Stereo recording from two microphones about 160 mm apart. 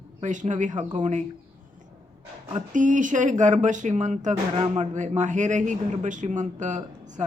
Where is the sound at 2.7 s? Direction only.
50° right (ahead or behind).